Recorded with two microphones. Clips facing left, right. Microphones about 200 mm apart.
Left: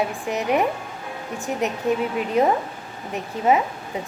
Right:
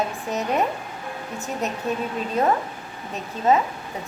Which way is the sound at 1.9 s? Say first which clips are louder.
Left 6 dB; 15° left (ahead or behind).